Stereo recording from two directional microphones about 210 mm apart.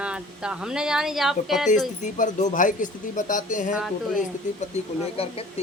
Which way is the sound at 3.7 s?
Centre (ahead or behind).